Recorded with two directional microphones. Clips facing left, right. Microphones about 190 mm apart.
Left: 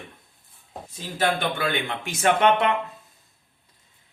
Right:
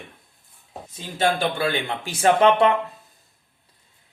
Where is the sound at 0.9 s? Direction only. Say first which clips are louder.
Right 2 dB; 30° right (ahead or behind).